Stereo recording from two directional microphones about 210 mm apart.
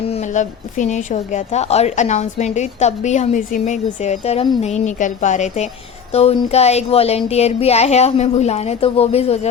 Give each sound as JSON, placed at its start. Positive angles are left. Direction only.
{"t": 0.1, "sound": "a woman's voice", "side_deg": 35}